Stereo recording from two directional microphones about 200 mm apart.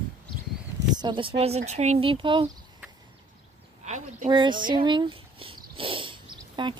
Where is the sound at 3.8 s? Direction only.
35° right (ahead or behind).